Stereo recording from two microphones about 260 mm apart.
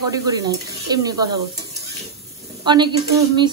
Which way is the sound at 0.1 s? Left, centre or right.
Centre.